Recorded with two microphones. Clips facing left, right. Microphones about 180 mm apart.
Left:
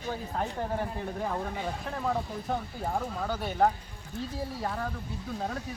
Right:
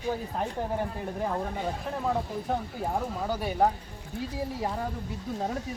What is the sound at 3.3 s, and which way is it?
Speech, 10° right (ahead or behind).